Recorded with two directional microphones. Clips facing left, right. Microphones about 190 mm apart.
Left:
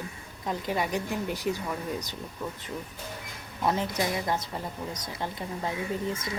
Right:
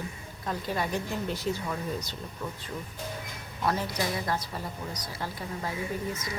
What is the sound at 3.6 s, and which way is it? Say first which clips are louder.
A woman's voice: left 2 dB; 20° left (ahead or behind).